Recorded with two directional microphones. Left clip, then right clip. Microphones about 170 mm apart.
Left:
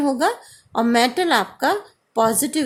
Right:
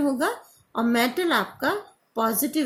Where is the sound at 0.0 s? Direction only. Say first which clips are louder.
Left 5 dB; 50° left (ahead or behind).